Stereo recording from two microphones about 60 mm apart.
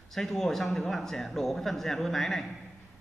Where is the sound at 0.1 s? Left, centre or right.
Centre.